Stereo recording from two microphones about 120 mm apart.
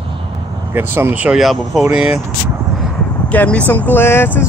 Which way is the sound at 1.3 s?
Centre (ahead or behind).